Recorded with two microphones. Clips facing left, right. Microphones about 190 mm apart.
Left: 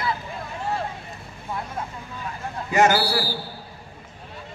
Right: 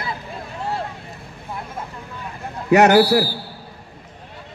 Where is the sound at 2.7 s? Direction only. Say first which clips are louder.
Right 7 dB; 65° right (ahead or behind).